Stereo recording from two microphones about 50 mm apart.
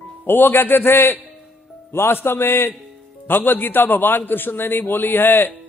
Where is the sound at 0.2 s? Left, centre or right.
Left.